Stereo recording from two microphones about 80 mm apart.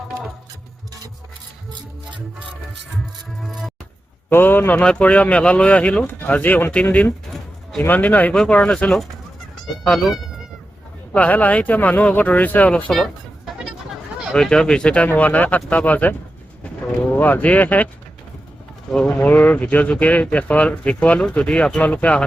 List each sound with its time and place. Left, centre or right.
3.4 s speech: centre
4.3 s speech: left
9.8 s speech: centre
11.1 s speech: centre
12.9 s music: centre
14.3 s speech: centre
18.9 s speech: centre
19.1 s speech: left